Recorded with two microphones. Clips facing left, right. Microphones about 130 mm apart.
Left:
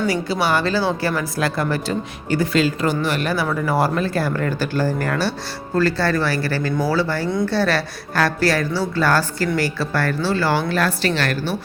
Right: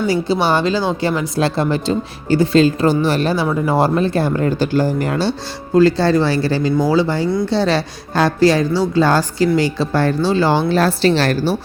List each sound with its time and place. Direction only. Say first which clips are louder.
0.1 s a woman's voice: right 4 dB; 25° right (ahead or behind)